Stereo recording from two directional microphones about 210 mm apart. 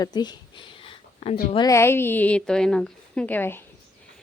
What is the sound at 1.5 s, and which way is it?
Speech, 15° left (ahead or behind).